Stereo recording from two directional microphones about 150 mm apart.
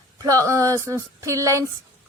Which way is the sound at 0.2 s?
20° right (ahead or behind).